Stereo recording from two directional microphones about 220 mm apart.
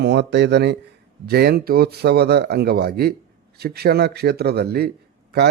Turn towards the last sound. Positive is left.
turn(degrees=-45)  # may be behind; listen again after turning